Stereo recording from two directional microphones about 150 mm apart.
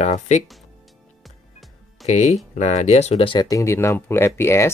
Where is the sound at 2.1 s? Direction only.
50° left (ahead or behind).